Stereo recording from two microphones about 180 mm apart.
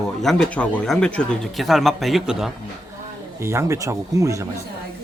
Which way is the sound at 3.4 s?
15° right (ahead or behind).